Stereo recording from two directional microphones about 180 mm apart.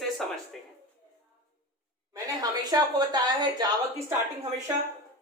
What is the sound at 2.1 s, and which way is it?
A woman's voice, 20° right (ahead or behind).